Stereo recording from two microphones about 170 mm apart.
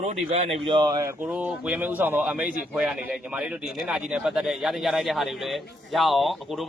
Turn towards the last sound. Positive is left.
turn(degrees=0)  # may be behind; listen again after turning